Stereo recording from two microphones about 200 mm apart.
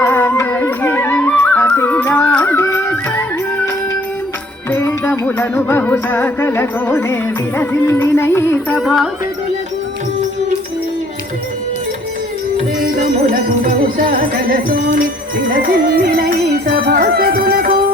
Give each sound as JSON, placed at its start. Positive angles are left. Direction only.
{"t": 0.0, "sound": "music", "side_deg": 10}
{"t": 4.7, "sound": "music", "side_deg": 10}
{"t": 8.8, "sound": "music", "side_deg": 0}
{"t": 13.3, "sound": "music", "side_deg": -45}